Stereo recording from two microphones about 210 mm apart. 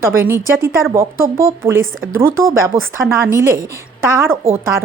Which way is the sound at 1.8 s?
70° right (ahead or behind).